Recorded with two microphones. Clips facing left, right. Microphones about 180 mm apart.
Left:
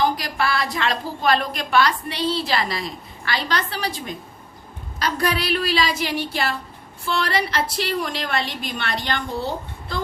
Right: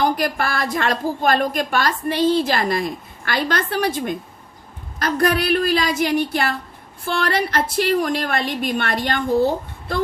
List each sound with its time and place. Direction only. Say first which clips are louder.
0.0 s a woman's voice: right 2 dB; 50° right (ahead or behind)